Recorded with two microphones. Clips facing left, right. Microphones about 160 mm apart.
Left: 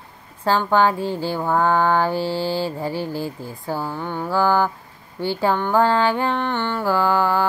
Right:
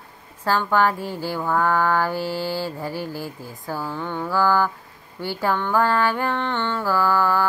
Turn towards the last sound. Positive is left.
turn(degrees=20)  # may be behind; listen again after turning